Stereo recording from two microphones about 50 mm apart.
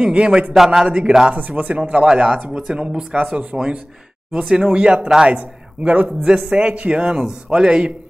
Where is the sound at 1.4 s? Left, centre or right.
Right.